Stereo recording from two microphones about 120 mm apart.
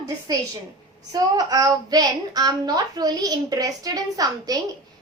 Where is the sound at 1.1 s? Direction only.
30° right (ahead or behind).